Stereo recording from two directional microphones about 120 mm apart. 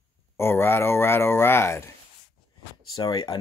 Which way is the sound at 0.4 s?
20° left (ahead or behind).